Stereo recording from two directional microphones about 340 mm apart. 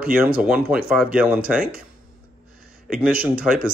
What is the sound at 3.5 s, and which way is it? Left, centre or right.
Speech, centre.